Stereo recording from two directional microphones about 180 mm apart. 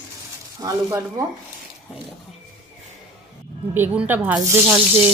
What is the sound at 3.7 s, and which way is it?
Speech, 10° right (ahead or behind).